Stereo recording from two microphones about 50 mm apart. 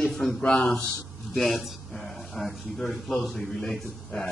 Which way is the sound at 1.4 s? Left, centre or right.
Centre.